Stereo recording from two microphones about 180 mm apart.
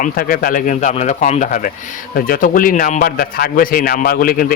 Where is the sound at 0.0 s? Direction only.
55° left (ahead or behind).